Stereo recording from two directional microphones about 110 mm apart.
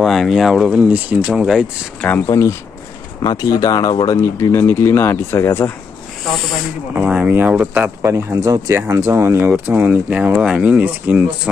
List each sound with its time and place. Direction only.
0.0 s speech: centre (ahead or behind)
0.8 s speech: 15° right (ahead or behind)
2.0 s speech: 15° left (ahead or behind)
2.2 s speech: 25° left (ahead or behind)
7.0 s speech: 10° right (ahead or behind)